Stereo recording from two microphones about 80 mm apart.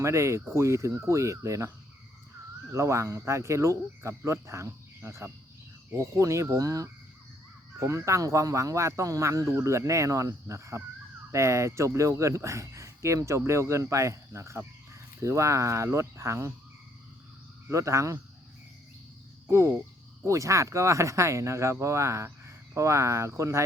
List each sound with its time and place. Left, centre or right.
0.0 s speech: right
2.7 s speech: right
17.7 s speech: right
19.5 s speech: right